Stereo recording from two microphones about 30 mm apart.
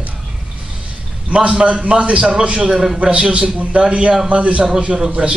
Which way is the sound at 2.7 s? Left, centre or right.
Centre.